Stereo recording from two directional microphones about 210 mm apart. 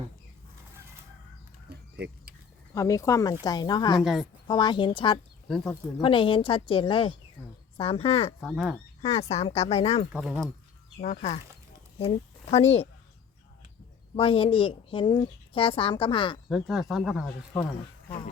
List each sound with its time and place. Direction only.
2.0 s speech: 50° right (ahead or behind)
2.7 s speech: 15° left (ahead or behind)
4.0 s speech: centre (ahead or behind)
4.4 s speech: 20° left (ahead or behind)
8.4 s speech: 5° right (ahead or behind)
9.0 s speech: 30° left (ahead or behind)
10.1 s speech: centre (ahead or behind)
11.0 s speech: 35° left (ahead or behind)
14.2 s speech: 25° left (ahead or behind)
16.5 s speech: centre (ahead or behind)
17.2 s speech: 15° left (ahead or behind)